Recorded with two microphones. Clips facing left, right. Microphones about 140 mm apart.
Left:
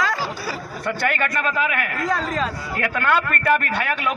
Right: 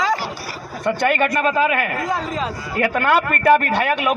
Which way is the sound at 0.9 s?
20° right (ahead or behind).